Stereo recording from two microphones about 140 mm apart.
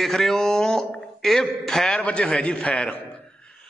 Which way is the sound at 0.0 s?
Centre (ahead or behind).